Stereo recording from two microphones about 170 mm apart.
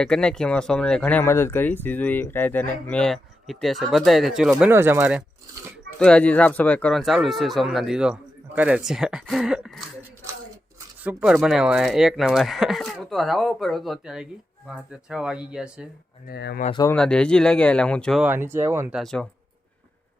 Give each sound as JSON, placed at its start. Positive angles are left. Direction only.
{"t": 0.0, "sound": "speech", "side_deg": 5}
{"t": 4.7, "sound": "speech", "side_deg": -15}
{"t": 6.0, "sound": "speech", "side_deg": 5}
{"t": 11.0, "sound": "speech", "side_deg": -5}
{"t": 16.2, "sound": "speech", "side_deg": 70}
{"t": 16.9, "sound": "speech", "side_deg": 5}
{"t": 18.2, "sound": "speech", "side_deg": -15}
{"t": 18.9, "sound": "speech", "side_deg": 5}